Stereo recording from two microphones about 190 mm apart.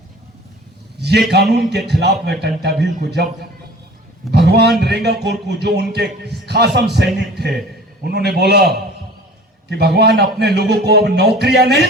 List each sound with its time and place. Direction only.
0.9 s a man's voice: 60° right (ahead or behind)